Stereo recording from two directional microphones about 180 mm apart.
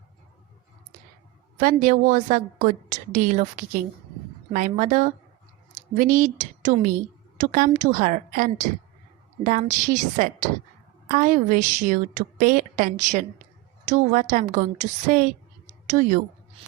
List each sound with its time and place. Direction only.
1.5 s a woman's voice: 45° right (ahead or behind)